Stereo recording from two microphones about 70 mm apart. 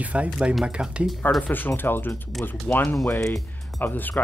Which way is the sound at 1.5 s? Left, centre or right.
Left.